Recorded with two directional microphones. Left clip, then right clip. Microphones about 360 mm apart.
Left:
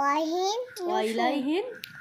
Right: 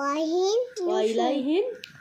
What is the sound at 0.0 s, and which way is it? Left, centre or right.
Babbling, centre.